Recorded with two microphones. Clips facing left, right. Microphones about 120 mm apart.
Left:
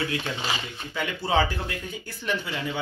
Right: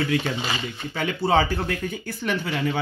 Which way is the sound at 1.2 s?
60° right (ahead or behind).